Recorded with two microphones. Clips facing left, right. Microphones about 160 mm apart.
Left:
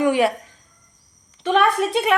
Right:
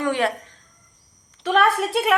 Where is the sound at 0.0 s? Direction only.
10° left (ahead or behind).